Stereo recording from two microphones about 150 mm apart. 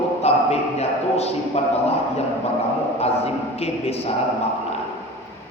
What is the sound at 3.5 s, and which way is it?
Speech, 45° left (ahead or behind).